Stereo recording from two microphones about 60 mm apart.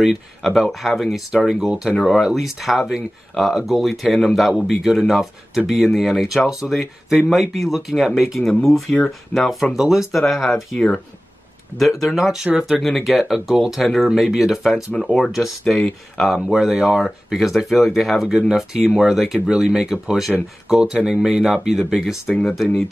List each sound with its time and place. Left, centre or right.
0.0 s speech: centre
1.7 s speech: centre
2.0 s speech: centre
9.8 s speech: centre
11.7 s speech: centre
12.8 s speech: centre
22.3 s speech: centre